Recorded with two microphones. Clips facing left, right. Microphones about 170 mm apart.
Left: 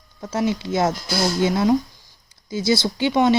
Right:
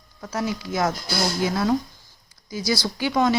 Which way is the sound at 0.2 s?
25° left (ahead or behind).